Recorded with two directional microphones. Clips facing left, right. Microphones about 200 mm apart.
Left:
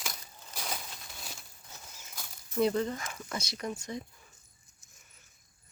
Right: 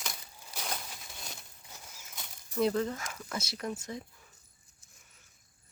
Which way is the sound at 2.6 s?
Centre (ahead or behind).